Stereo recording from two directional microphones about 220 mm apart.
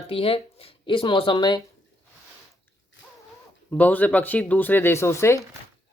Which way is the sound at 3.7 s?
5° left (ahead or behind).